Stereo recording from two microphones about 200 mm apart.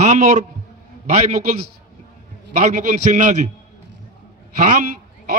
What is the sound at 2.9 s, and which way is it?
Speech, 40° right (ahead or behind).